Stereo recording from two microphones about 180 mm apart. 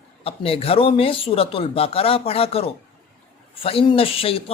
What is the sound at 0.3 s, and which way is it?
Speech, 30° left (ahead or behind).